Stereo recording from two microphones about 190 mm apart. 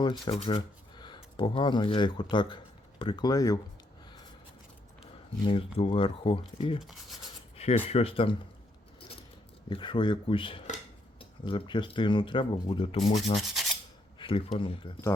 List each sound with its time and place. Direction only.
0.0 s speech: 25° left (ahead or behind)
5.5 s speech: 30° left (ahead or behind)
7.5 s a sound: 35° left (ahead or behind)
7.9 s speech: 30° left (ahead or behind)
9.6 s speech: 25° left (ahead or behind)